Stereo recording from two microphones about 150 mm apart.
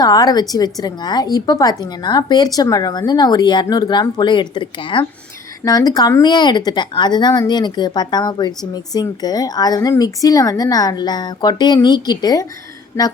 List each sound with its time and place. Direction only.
0.0 s speech: 25° left (ahead or behind)